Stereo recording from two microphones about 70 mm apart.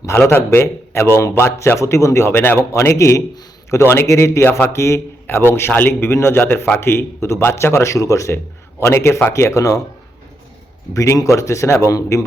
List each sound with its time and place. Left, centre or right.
0.0 s a man's voice: left
2.7 s a man's voice: left
10.9 s a man's voice: left